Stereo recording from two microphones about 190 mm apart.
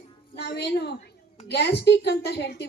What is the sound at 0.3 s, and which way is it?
A woman's voice, 60° left (ahead or behind).